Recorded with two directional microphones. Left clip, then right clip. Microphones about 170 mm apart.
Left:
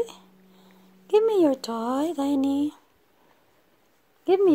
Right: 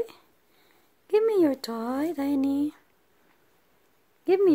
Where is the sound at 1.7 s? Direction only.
Centre (ahead or behind).